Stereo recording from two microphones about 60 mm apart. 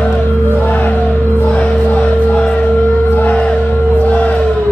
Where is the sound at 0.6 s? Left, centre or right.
Left.